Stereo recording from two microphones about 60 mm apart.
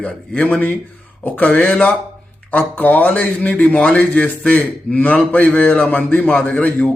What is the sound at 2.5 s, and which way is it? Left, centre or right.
A man's voice, left.